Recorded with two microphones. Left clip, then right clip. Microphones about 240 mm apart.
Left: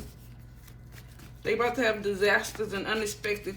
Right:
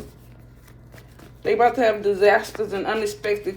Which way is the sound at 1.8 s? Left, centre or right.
Left.